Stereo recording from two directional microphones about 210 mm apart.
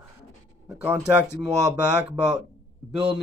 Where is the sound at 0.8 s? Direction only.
5° right (ahead or behind).